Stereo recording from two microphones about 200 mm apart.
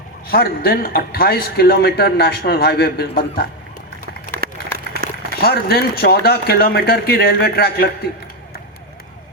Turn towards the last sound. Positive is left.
turn(degrees=50)  # may be behind; listen again after turning